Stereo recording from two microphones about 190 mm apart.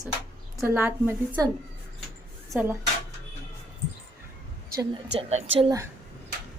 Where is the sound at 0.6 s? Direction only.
10° right (ahead or behind).